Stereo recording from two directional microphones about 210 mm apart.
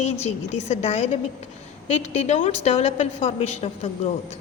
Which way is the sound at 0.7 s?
35° left (ahead or behind).